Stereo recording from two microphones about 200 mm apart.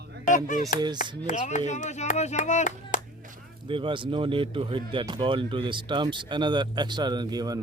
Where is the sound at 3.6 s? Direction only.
25° right (ahead or behind).